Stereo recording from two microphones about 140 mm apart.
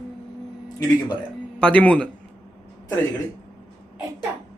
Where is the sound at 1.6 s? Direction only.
10° left (ahead or behind).